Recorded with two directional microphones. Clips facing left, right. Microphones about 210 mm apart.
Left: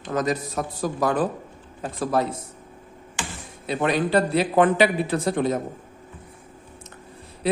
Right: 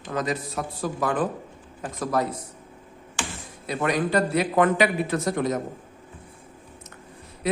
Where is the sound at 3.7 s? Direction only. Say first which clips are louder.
Left 2 dB; 30° left (ahead or behind).